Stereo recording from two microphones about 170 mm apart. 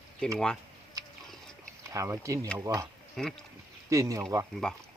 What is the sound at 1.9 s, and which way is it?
Speech, 20° right (ahead or behind).